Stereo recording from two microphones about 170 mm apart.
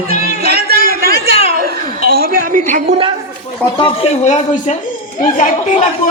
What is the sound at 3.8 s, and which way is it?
A man's voice, 35° left (ahead or behind).